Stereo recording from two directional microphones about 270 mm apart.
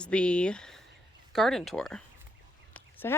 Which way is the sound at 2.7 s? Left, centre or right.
Centre.